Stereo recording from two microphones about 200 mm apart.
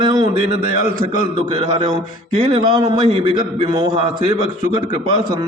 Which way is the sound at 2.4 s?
25° right (ahead or behind).